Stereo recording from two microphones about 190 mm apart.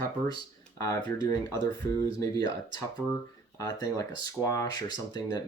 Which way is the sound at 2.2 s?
20° left (ahead or behind).